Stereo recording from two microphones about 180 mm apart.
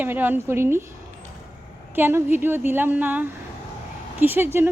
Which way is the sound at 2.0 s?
10° right (ahead or behind).